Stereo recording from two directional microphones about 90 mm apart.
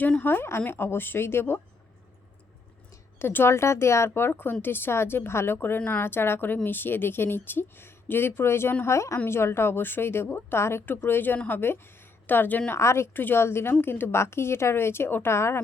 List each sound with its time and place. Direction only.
0.0 s a woman's voice: 20° left (ahead or behind)
2.9 s a woman's voice: 25° left (ahead or behind)
12.8 s a woman's voice: 30° left (ahead or behind)